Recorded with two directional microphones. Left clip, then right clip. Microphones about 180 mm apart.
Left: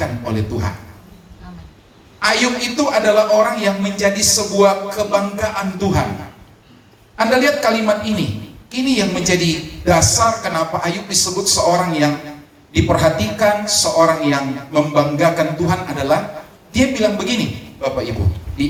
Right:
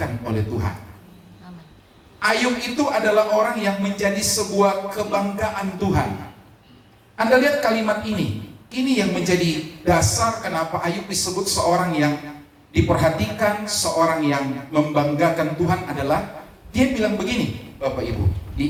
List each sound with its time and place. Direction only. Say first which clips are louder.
0.0 s a man's voice: left 4 dB; 40° left (ahead or behind)
2.2 s a man's voice: left 4 dB; 40° left (ahead or behind)
7.2 s a man's voice: left 2 dB; 40° left (ahead or behind)